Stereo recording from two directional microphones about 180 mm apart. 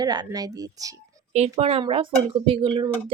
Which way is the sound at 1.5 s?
35° right (ahead or behind).